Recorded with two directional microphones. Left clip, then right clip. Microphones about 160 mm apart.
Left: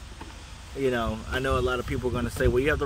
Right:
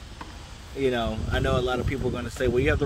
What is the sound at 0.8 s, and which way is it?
Speech, centre (ahead or behind).